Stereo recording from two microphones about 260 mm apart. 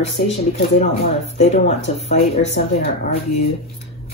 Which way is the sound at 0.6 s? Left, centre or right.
Left.